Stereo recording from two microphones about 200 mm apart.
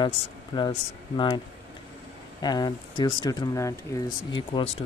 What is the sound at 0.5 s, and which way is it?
Speech, 20° left (ahead or behind).